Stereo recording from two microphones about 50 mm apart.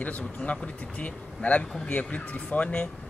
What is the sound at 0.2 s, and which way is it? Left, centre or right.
A man's voice, left.